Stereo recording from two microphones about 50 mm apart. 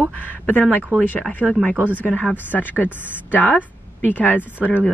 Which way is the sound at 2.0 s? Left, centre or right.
Left.